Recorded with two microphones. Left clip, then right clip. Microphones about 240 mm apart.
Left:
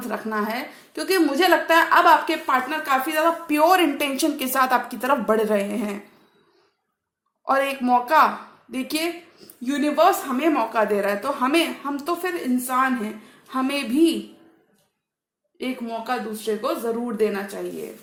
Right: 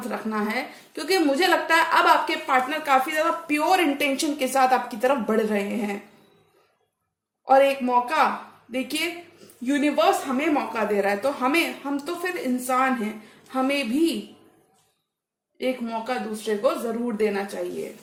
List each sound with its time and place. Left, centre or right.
0.1 s a woman's voice: left
7.4 s a woman's voice: left
15.5 s a woman's voice: left